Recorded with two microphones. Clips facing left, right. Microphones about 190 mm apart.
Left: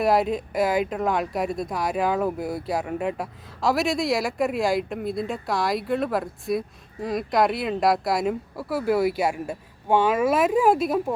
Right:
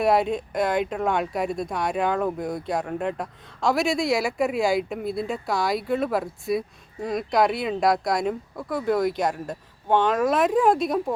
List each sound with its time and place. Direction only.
0.0 s speech: centre (ahead or behind)